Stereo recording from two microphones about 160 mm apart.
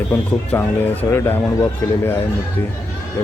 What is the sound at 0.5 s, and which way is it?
A man's voice, 15° left (ahead or behind).